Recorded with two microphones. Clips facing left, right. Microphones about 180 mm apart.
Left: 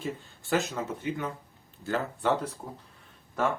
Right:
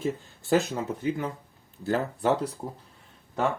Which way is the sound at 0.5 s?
35° right (ahead or behind).